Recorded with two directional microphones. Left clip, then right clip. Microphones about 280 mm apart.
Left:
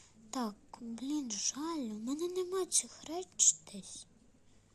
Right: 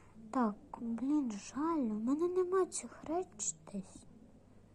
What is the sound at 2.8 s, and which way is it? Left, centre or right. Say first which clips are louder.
Speech: even; left.